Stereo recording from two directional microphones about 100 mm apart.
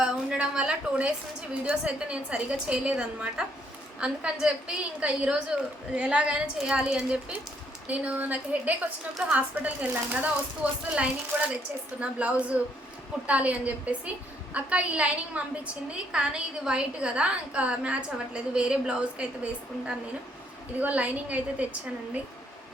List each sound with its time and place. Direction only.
0.0 s a woman's voice: 10° right (ahead or behind)
20.7 s a woman's voice: 15° right (ahead or behind)